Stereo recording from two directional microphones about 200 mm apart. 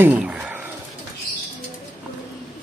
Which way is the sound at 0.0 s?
5° right (ahead or behind).